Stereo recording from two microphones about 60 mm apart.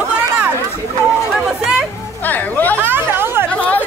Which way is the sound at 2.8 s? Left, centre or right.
Right.